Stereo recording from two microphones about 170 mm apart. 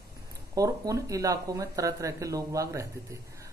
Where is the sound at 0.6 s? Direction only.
20° right (ahead or behind).